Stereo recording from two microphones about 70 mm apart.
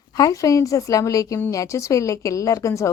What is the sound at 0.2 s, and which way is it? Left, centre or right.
Speech, left.